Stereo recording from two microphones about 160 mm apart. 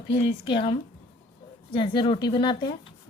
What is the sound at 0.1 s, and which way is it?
Speech, 35° left (ahead or behind).